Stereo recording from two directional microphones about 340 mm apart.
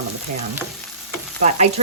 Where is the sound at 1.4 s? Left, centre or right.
Centre.